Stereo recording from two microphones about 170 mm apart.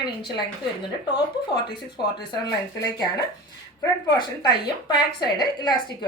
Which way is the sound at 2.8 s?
20° left (ahead or behind).